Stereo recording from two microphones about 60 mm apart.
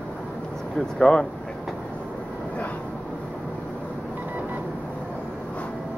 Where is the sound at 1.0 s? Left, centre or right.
Centre.